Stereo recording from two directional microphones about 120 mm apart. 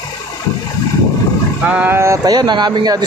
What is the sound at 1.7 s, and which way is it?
Speech, 15° right (ahead or behind).